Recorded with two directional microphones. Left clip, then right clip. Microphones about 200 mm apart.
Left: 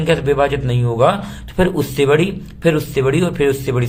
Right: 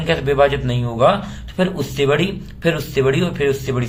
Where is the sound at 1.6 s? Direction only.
35° left (ahead or behind).